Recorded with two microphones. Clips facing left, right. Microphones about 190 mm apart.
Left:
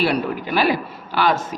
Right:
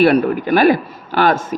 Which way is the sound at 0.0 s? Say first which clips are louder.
Right 8 dB; 50° right (ahead or behind).